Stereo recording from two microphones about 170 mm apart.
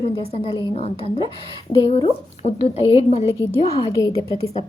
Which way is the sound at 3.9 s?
20° left (ahead or behind).